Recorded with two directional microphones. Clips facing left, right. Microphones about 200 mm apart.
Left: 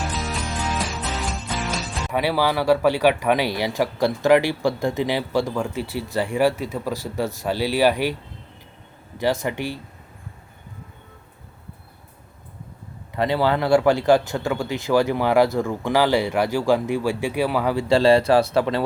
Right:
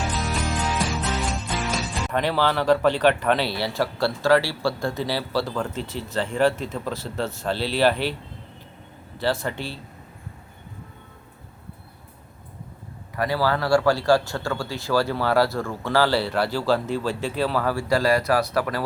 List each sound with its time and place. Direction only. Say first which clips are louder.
0.0 s music: right 1 dB; centre (ahead or behind)
9.2 s speech: left 3 dB; 15° left (ahead or behind)
13.1 s speech: left 3 dB; 20° left (ahead or behind)